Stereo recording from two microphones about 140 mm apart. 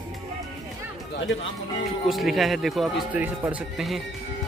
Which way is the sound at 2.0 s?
Centre (ahead or behind).